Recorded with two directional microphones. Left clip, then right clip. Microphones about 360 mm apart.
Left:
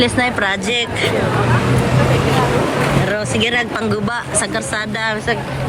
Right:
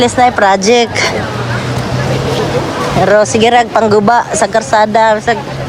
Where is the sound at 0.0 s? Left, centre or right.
Centre.